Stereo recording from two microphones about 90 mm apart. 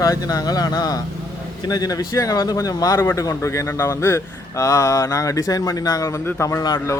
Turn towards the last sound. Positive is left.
turn(degrees=30)  # may be behind; listen again after turning